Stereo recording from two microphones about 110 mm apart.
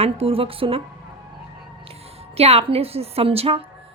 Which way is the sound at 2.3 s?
70° right (ahead or behind).